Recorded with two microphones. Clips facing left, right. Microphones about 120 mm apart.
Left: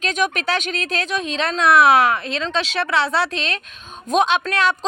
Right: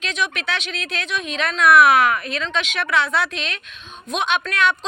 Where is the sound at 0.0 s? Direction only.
45° left (ahead or behind).